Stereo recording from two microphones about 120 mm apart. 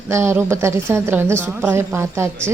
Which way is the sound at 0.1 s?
20° right (ahead or behind).